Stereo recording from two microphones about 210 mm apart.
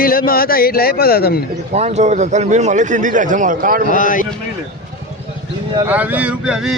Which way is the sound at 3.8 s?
40° left (ahead or behind).